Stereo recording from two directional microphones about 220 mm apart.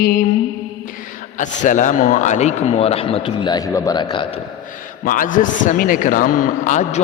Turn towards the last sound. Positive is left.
turn(degrees=35)  # may be behind; listen again after turning